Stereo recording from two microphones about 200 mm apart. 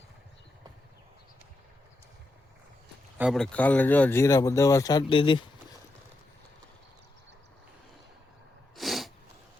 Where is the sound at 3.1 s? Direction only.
Centre (ahead or behind); by 5.4 s 25° left (ahead or behind).